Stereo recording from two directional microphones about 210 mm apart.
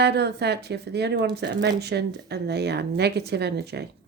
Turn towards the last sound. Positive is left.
turn(degrees=-50)  # may be behind; listen again after turning